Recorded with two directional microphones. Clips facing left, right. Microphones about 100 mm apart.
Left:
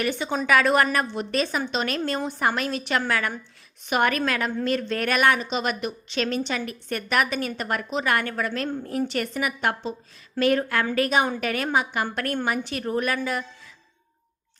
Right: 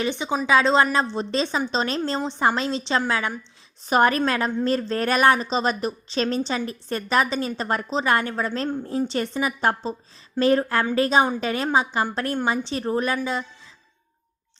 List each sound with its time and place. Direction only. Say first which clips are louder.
0.0 s a woman's voice: right 1 dB; 20° right (ahead or behind)
3.8 s a woman's voice: right 4 dB; 35° right (ahead or behind)